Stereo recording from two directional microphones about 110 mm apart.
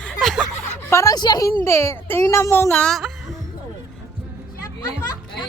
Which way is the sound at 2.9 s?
Centre (ahead or behind).